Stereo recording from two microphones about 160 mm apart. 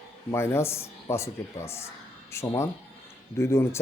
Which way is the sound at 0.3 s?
15° left (ahead or behind).